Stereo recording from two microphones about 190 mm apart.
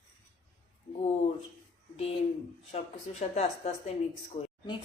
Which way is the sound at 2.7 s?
35° left (ahead or behind).